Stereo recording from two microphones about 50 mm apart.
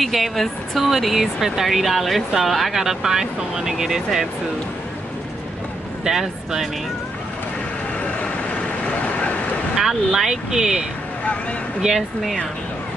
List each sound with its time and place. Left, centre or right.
0.0 s speech: centre
6.0 s speech: centre
8.0 s vehicle: left
9.8 s speech: centre